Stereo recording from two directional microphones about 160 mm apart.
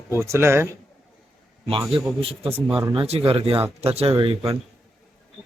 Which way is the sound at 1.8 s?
10° right (ahead or behind).